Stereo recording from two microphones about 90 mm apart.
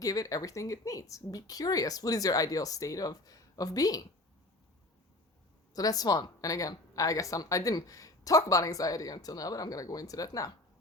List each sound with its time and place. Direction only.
0.0 s a woman's voice: 40° left (ahead or behind)
5.7 s a woman's voice: 45° left (ahead or behind)